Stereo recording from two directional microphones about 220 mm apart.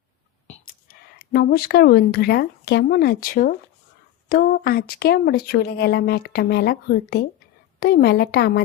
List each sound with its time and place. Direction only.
0.9 s speech: 45° left (ahead or behind)